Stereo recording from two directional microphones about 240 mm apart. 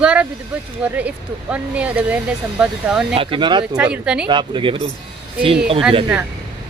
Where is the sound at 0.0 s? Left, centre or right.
Centre.